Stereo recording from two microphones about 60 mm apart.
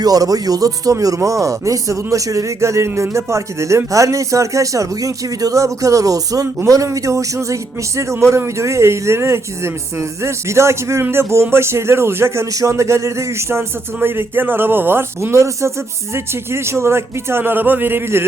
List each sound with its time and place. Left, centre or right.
0.0 s speech: right
6.7 s a man's voice: right
12.5 s a man's voice: right
15.2 s a man's voice: right